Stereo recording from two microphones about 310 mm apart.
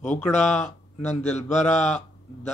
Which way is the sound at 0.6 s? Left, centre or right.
Left.